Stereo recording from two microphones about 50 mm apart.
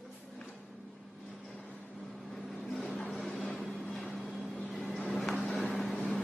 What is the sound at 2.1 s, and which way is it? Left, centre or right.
Vehicle, centre.